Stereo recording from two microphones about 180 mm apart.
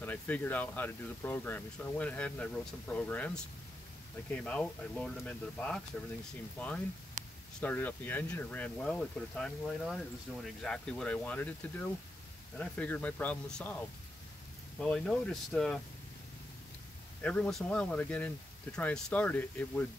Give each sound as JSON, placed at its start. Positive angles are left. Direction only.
{"t": 0.0, "sound": "speech", "side_deg": 10}
{"t": 7.6, "sound": "speech", "side_deg": 10}
{"t": 14.8, "sound": "speech", "side_deg": 5}
{"t": 17.2, "sound": "speech", "side_deg": 5}